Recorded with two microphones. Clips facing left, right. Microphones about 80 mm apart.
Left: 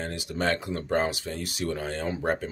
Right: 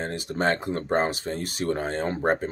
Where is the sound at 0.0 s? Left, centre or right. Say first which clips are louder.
Right 3 dB; right.